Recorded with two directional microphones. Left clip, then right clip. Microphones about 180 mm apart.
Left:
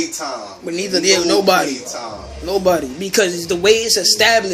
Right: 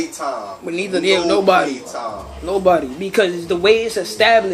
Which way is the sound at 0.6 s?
15° left (ahead or behind).